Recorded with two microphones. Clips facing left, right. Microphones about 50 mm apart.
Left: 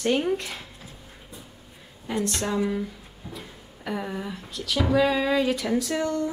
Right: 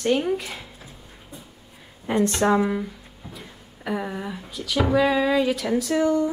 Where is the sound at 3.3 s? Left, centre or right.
Centre.